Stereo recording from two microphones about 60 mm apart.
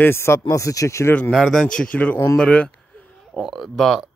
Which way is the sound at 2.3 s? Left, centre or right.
Centre.